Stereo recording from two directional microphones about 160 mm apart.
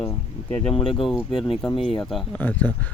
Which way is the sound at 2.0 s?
Centre (ahead or behind).